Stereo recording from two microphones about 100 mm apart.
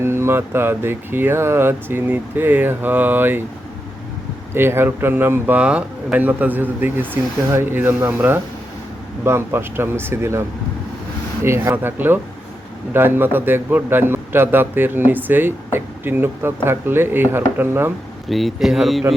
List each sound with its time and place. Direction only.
0.0 s a man's voice: 25° right (ahead or behind)
4.5 s a man's voice: 25° right (ahead or behind)
11.4 s a man's voice: 25° right (ahead or behind)
18.3 s speech: centre (ahead or behind)